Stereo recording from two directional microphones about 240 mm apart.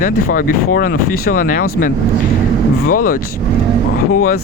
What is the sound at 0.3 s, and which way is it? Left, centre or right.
Speech, left.